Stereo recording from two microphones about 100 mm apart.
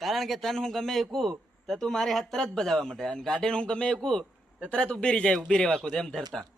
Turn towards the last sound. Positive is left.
turn(degrees=5)  # may be behind; listen again after turning